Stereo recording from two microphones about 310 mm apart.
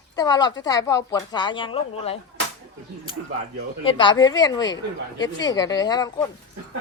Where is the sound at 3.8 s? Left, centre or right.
Centre.